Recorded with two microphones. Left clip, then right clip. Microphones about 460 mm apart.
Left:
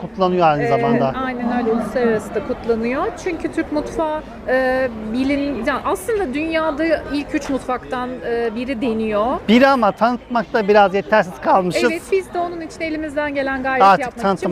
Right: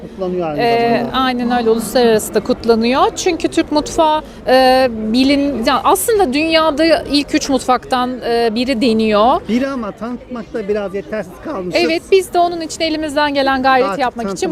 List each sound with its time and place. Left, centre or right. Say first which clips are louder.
0.6 s speech: right 3 dB; right
9.5 s speech: left 7 dB; left
11.7 s speech: right 5 dB; right